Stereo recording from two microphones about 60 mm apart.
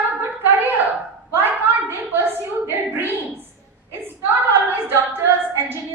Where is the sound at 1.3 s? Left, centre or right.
Right.